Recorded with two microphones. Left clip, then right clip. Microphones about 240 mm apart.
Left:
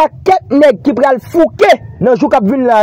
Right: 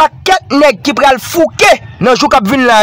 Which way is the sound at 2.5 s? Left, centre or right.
Centre.